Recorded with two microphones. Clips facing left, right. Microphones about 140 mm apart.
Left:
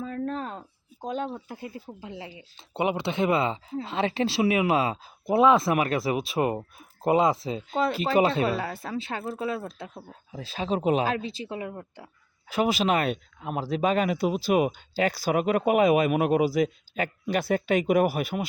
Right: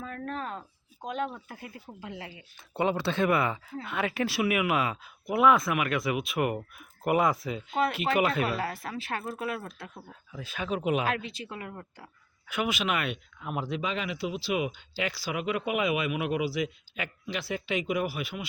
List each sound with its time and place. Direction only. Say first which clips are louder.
0.1 s a sound: left 3 dB; 35° left (ahead or behind)
1.0 s speech: left 2 dB; 30° left (ahead or behind)
12.5 s speech: left 6 dB; 35° left (ahead or behind)